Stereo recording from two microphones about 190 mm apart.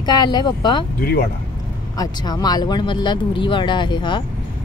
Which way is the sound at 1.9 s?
20° left (ahead or behind).